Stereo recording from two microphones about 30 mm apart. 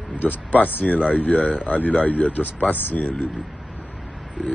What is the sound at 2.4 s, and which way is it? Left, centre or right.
Speech, left.